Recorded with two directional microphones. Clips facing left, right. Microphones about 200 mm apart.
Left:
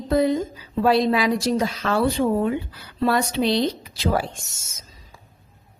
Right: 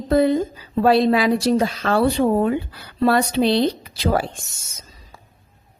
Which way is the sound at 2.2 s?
40° right (ahead or behind).